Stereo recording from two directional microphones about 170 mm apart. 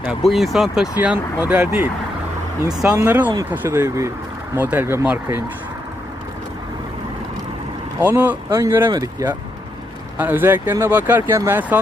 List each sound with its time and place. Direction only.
0.0 s speech: 5° right (ahead or behind)
3.0 s speech: 10° right (ahead or behind)
8.0 s speech: 10° right (ahead or behind)
10.2 s speech: 10° right (ahead or behind)